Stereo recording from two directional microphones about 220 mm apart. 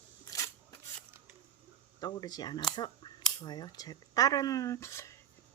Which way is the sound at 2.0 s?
20° left (ahead or behind).